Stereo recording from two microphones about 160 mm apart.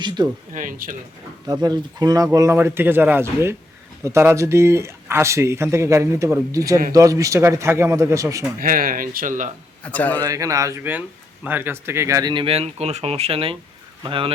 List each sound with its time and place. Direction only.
0.0 s a man's voice: 25° right (ahead or behind)
0.5 s speech: 55° right (ahead or behind)
1.6 s a man's voice: 25° right (ahead or behind)
8.5 s speech: 60° right (ahead or behind)
9.8 s a man's voice: 10° left (ahead or behind)
10.2 s a man's voice: 20° right (ahead or behind)